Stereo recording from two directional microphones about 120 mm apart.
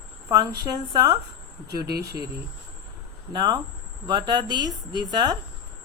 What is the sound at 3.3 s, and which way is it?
A woman's voice, 35° right (ahead or behind).